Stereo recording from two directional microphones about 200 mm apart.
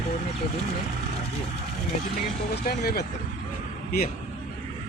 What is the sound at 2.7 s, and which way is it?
Speech, 50° left (ahead or behind).